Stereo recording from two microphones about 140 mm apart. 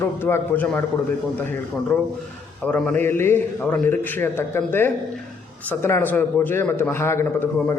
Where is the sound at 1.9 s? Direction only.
10° left (ahead or behind).